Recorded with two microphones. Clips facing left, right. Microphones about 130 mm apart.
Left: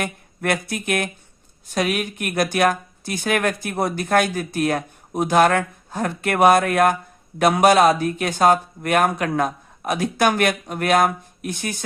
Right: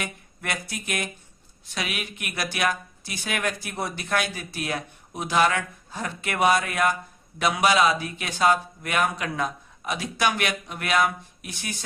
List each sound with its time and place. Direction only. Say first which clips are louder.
0.0 s speech: left 8 dB; 55° left (ahead or behind)
1.6 s speech: left 10 dB; 45° left (ahead or behind)